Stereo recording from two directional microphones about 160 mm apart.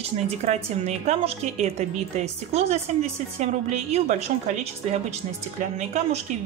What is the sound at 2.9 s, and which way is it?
A woman's voice, 50° right (ahead or behind).